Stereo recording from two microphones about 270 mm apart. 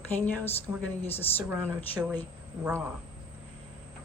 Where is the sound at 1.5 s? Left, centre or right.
Centre.